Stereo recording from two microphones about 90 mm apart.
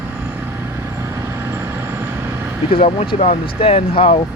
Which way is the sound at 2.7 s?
90° left.